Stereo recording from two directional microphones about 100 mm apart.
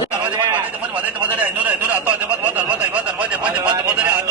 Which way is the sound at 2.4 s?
15° right (ahead or behind).